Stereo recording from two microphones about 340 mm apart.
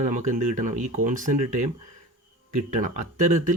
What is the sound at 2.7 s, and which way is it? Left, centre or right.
Speech, right.